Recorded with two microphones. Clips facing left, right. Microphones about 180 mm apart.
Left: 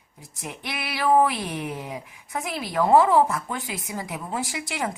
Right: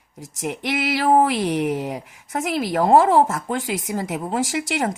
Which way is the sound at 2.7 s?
45° right (ahead or behind).